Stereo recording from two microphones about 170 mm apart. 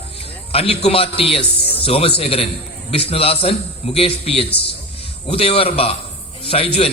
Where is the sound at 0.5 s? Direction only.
35° left (ahead or behind).